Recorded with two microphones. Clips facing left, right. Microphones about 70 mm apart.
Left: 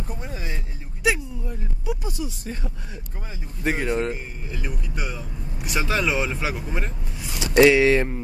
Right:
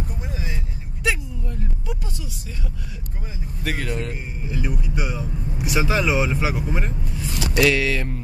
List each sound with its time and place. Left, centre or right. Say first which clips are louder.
1.0 s a sound: left 2 dB; centre
2.2 s speech: left 4 dB; left
3.6 s speech: left 4 dB; left
4.5 s speech: right 7 dB; centre
7.5 s speech: left 5 dB; left